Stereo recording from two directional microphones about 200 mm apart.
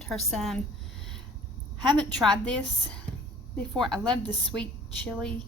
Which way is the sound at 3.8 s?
5° left (ahead or behind).